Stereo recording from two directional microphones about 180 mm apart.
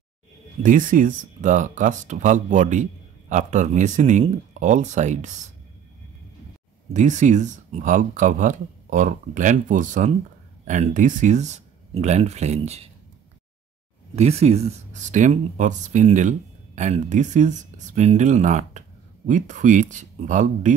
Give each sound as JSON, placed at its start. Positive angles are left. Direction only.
{"t": 0.6, "sound": "speech", "side_deg": -50}
{"t": 6.9, "sound": "speech", "side_deg": -40}
{"t": 14.1, "sound": "speech", "side_deg": -35}